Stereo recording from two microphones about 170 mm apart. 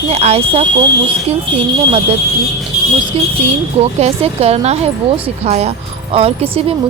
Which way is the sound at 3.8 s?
40° right (ahead or behind).